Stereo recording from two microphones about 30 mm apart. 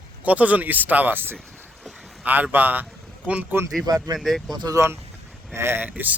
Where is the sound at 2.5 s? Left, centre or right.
Right.